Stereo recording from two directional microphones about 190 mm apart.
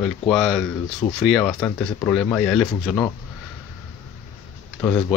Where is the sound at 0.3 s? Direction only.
Centre (ahead or behind).